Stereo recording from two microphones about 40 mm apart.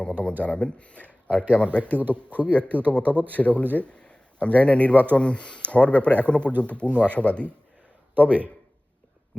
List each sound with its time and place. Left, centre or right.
0.0 s a man's voice: left
2.0 s speech: right
2.4 s a man's voice: left
8.1 s speech: right
9.3 s speech: left